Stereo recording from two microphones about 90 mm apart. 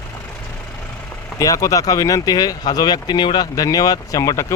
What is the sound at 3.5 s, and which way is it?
Speech, 45° left (ahead or behind).